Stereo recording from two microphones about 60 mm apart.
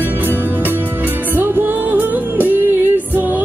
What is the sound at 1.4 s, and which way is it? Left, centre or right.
Music, right.